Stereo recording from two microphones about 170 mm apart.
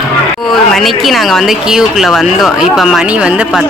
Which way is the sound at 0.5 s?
Centre (ahead or behind).